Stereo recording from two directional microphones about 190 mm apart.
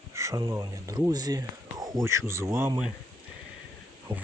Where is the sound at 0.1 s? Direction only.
15° right (ahead or behind).